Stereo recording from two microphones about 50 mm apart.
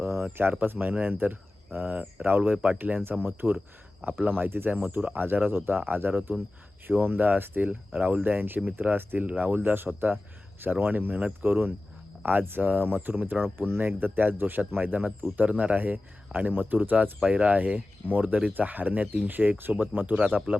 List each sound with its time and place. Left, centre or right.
0.0 s a sound: right
0.6 s speech: right
2.4 s speech: right
4.9 s speech: right
5.2 s speech: right
9.6 s speech: right
17.2 s speech: right